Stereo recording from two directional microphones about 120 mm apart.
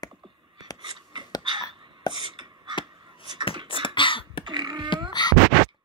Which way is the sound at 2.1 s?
40° right (ahead or behind).